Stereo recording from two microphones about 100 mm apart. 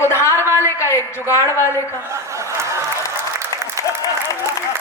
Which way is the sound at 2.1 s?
30° right (ahead or behind).